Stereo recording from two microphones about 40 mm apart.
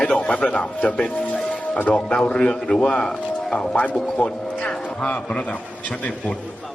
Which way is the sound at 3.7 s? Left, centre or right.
Left.